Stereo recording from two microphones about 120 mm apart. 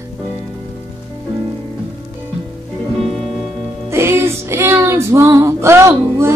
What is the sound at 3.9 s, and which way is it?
Music, 20° right (ahead or behind).